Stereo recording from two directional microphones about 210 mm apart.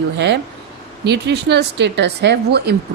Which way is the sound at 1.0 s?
55° right (ahead or behind).